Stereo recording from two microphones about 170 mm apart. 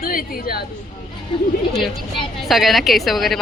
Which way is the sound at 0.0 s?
60° left (ahead or behind).